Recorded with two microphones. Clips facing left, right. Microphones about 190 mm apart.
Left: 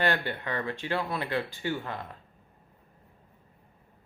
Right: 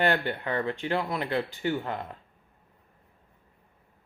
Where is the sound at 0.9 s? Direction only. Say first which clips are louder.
Even; 20° right (ahead or behind).